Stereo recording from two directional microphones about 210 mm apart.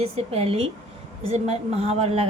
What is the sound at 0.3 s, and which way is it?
A woman's voice, 25° right (ahead or behind).